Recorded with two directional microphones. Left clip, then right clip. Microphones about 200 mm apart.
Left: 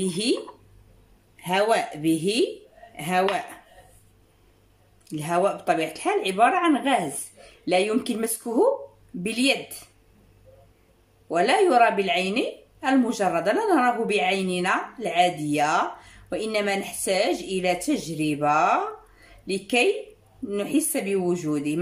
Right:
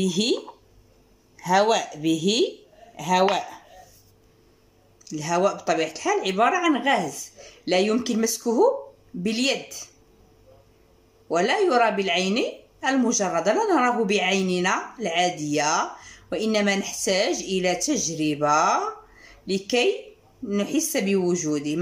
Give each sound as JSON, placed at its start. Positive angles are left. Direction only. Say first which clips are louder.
{"t": 0.0, "sound": "a woman's voice", "louder": "right 1 dB", "side_deg": 5}
{"t": 5.1, "sound": "a woman's voice", "louder": "right 1 dB", "side_deg": 5}
{"t": 11.2, "sound": "a woman's voice", "louder": "left 1 dB", "side_deg": 5}